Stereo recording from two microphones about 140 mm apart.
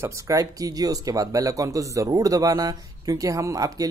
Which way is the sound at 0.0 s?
25° right (ahead or behind).